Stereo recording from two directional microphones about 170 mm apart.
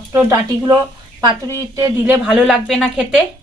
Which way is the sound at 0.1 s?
15° right (ahead or behind).